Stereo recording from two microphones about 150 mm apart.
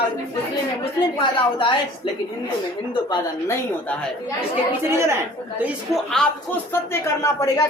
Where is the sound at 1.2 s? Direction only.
35° left (ahead or behind).